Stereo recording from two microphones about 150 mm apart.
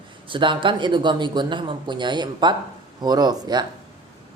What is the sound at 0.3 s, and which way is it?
A woman's voice, 30° right (ahead or behind).